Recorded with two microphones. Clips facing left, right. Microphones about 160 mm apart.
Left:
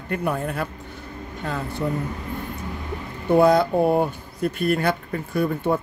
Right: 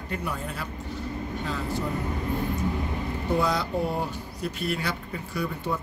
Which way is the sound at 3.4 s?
55° left (ahead or behind).